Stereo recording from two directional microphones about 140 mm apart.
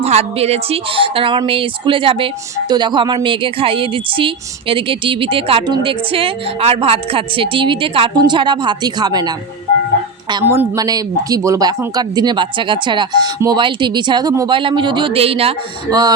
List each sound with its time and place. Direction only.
0.0 s speech: 50° right (ahead or behind); by 9.3 s 30° right (ahead or behind)
10.4 s a woman's voice: 15° right (ahead or behind)
10.8 s speech: 25° right (ahead or behind); by 15.5 s 45° right (ahead or behind)
15.9 s speech: 30° right (ahead or behind)